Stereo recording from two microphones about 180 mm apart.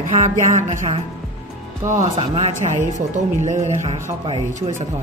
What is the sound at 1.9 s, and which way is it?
Speech, 40° right (ahead or behind).